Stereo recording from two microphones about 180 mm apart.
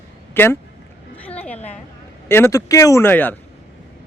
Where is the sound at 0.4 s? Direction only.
10° left (ahead or behind).